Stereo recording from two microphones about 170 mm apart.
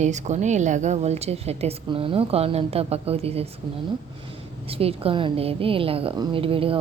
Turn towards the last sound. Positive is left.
turn(degrees=-30)  # may be behind; listen again after turning